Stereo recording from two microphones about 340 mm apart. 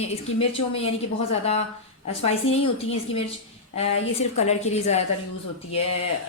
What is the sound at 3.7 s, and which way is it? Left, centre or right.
Speech, centre.